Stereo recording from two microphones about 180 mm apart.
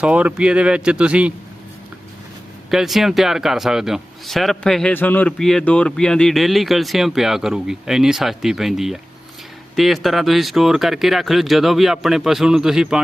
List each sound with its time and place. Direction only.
0.0 s speech: 5° right (ahead or behind)
2.6 s speech: centre (ahead or behind)